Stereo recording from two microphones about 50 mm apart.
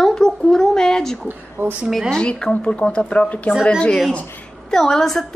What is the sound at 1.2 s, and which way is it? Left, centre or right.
Speech, right.